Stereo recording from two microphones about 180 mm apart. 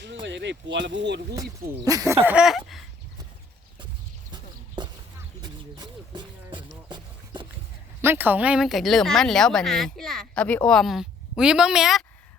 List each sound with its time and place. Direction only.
0.0 s speech: 85° right
1.7 s speech: 20° right (ahead or behind)
2.2 s a sound: 5° right (ahead or behind)
4.3 s a sound: 25° right (ahead or behind)
5.4 s music: 25° right (ahead or behind)
8.0 s speech: 10° right (ahead or behind)